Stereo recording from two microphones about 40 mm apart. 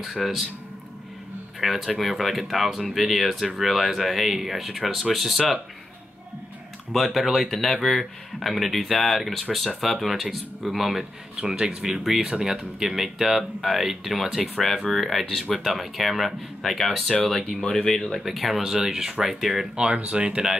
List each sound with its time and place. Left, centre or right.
0.0 s speech: centre
1.6 s speech: centre
6.9 s speech: centre
7.5 s speech: centre
11.3 s speech: centre
17.6 s speech: centre
18.2 s speech: centre
19.7 s speech: right